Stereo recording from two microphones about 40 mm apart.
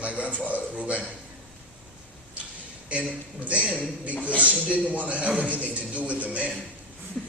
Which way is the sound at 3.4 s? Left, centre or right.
Right.